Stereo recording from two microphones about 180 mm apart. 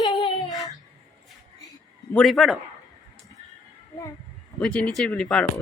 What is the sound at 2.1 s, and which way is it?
Speech, centre (ahead or behind).